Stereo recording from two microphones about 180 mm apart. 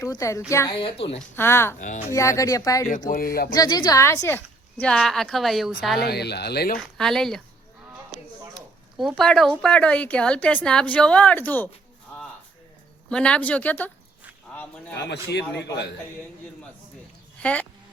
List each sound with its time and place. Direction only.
0.0 s a woman's voice: 20° left (ahead or behind)
0.7 s a woman's voice: 30° left (ahead or behind)
1.4 s a woman's voice: 15° left (ahead or behind)
1.8 s speech: 45° left (ahead or behind)
2.1 s a woman's voice: 15° left (ahead or behind)
3.1 s speech: 55° left (ahead or behind)
3.5 s a woman's voice: 20° left (ahead or behind); by 5.7 s centre (ahead or behind)
6.0 s speech: 65° left (ahead or behind)
6.7 s speech: centre (ahead or behind)
8.5 s speech: centre (ahead or behind)
13.1 s a woman's voice: 5° left (ahead or behind)
14.9 s a man's voice: 70° left (ahead or behind)
17.4 s speech: 5° left (ahead or behind)